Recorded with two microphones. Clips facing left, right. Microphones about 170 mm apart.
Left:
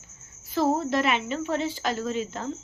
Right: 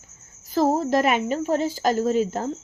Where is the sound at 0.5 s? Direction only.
40° right (ahead or behind).